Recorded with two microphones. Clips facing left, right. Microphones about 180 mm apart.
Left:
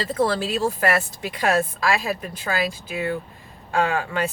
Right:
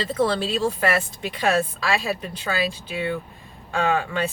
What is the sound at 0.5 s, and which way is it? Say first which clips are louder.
Speech: even; 45° left (ahead or behind).